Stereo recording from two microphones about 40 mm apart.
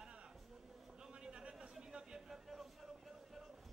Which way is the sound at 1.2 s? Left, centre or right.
Right.